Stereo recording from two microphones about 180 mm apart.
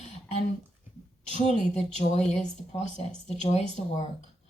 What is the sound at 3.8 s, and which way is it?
Speech, 40° left (ahead or behind).